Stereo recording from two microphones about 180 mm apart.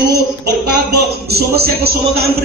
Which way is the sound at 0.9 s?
60° right (ahead or behind).